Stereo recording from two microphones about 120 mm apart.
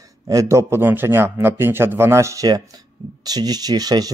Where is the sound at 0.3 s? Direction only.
25° right (ahead or behind).